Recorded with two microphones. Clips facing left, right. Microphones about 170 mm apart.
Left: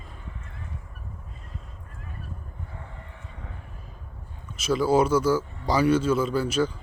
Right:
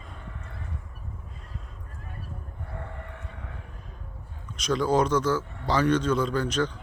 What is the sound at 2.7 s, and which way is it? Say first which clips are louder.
Vehicle: right 4 dB; 60° right (ahead or behind).